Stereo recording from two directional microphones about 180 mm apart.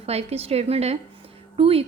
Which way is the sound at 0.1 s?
35° right (ahead or behind).